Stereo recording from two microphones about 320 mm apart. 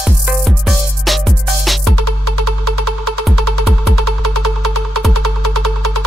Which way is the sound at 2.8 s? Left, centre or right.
Right.